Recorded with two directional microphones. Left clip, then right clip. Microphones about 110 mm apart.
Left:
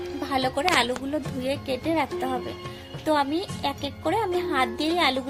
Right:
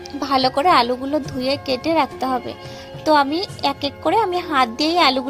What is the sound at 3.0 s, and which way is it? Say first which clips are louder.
A woman's voice: right 8 dB; 55° right (ahead or behind).